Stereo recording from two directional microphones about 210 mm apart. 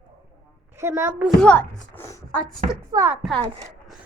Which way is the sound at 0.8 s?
10° right (ahead or behind).